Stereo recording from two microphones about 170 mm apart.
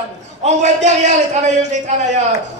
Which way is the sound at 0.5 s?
45° right (ahead or behind).